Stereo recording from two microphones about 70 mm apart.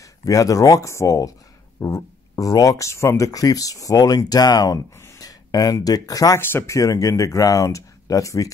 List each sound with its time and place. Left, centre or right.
0.0 s speech: left
1.8 s a sound: left
2.4 s speech: left
2.9 s speech: left
3.3 s speech: left
4.3 s speech: left